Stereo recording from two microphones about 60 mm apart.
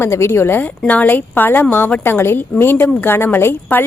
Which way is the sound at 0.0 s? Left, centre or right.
Left.